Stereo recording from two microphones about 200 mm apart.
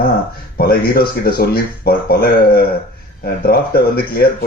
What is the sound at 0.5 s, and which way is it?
Speech, 50° left (ahead or behind).